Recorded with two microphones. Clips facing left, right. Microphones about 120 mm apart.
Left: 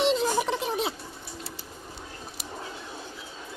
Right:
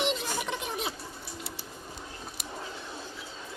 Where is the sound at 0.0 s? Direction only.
35° left (ahead or behind).